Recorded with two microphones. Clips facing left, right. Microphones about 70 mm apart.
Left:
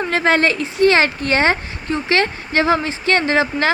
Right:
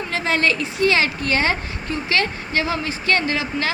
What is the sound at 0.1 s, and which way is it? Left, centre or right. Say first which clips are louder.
Speech: left 4 dB; left.